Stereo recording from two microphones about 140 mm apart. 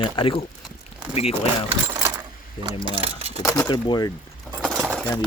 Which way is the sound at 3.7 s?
30° left (ahead or behind).